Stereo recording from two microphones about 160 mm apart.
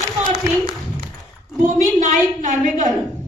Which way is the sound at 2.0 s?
50° right (ahead or behind).